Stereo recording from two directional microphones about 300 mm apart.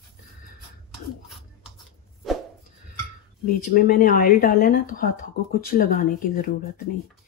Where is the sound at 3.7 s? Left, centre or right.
Left.